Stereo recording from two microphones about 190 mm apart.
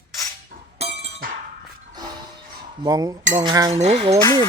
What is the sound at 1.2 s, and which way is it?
Chink, 45° right (ahead or behind).